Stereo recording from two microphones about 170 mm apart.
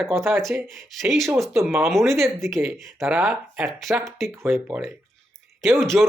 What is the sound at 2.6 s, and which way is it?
Speech, 15° right (ahead or behind).